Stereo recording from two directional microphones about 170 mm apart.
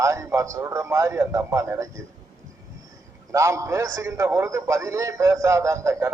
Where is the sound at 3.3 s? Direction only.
15° right (ahead or behind).